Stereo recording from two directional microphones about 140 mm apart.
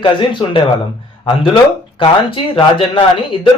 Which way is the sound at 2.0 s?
40° left (ahead or behind).